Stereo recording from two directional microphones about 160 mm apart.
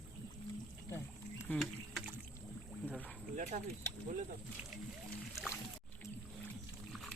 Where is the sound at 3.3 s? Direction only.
50° right (ahead or behind).